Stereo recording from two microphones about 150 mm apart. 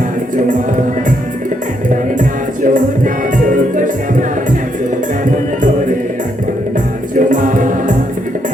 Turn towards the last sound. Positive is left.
turn(degrees=-60)  # may be behind; listen again after turning